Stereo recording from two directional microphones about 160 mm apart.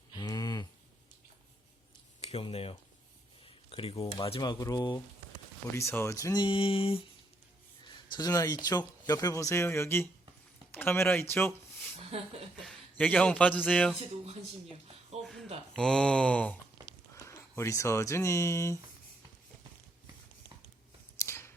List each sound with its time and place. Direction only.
0.1 s a sound: 25° left (ahead or behind)
2.2 s speech: 40° left (ahead or behind)
8.1 s speech: 25° left (ahead or behind)
11.9 s a woman's voice: 40° right (ahead or behind)
12.6 s a man's voice: 5° left (ahead or behind)
15.2 s a sound: centre (ahead or behind)
17.2 s speech: 15° left (ahead or behind)
21.2 s shuffling cards: 15° left (ahead or behind)